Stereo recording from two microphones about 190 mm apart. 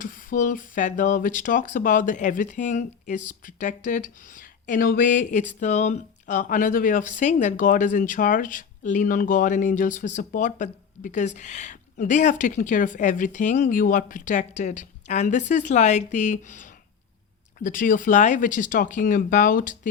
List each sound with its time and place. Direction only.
0.0 s speech: 45° left (ahead or behind)